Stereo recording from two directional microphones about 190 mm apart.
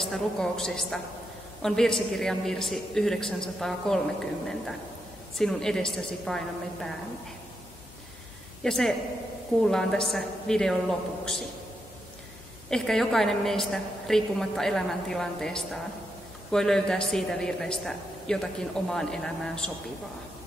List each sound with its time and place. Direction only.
0.0 s speech: centre (ahead or behind)
5.4 s speech: 5° left (ahead or behind)
8.6 s speech: centre (ahead or behind)
12.6 s speech: 5° left (ahead or behind)